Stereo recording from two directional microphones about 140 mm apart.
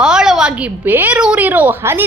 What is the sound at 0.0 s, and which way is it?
A woman's voice, 5° right (ahead or behind).